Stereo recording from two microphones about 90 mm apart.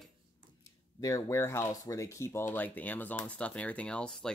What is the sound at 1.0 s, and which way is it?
Speech, 35° left (ahead or behind).